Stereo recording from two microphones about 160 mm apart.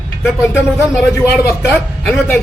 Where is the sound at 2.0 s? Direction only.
5° left (ahead or behind).